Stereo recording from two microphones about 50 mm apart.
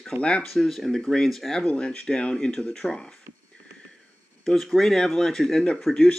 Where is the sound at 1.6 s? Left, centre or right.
Centre.